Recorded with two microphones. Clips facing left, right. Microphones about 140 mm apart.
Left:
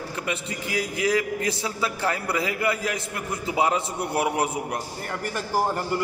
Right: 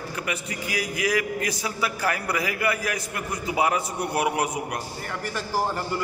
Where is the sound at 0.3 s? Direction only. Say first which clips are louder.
Left 2 dB; 30° left (ahead or behind).